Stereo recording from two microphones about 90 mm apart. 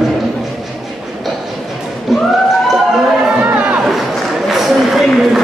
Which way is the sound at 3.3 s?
15° right (ahead or behind).